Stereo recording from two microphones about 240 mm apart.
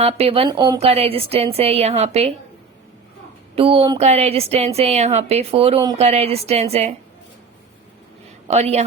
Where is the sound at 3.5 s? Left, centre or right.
Right.